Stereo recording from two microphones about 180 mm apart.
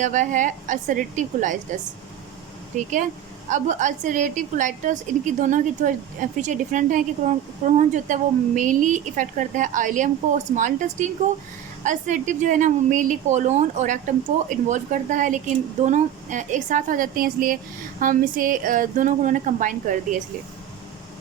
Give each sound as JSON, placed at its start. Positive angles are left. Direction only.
{"t": 0.0, "sound": "a woman's voice", "side_deg": -45}